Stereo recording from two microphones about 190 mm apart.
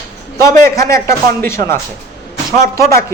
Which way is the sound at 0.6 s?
15° left (ahead or behind).